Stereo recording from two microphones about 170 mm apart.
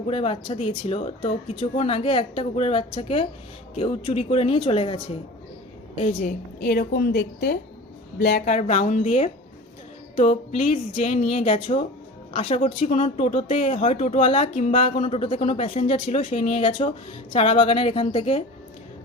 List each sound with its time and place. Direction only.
0.1 s speech: 35° left (ahead or behind)
6.0 s speech: 35° left (ahead or behind)
6.2 s a woman's voice: 60° left (ahead or behind)
8.4 s a woman's voice: 45° left (ahead or behind)